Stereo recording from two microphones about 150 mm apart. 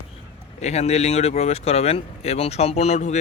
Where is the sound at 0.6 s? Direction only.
45° left (ahead or behind).